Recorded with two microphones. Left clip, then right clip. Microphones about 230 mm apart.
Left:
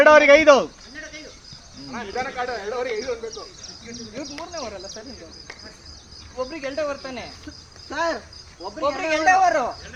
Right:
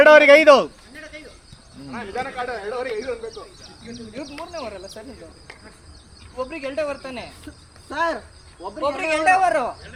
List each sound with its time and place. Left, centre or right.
0.0 s speech: right
0.9 s a sound: centre
1.9 s bird: right
4.5 s speech: right
6.3 s speech: right